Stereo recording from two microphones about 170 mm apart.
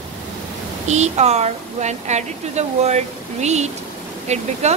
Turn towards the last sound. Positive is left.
turn(degrees=-40)  # may be behind; listen again after turning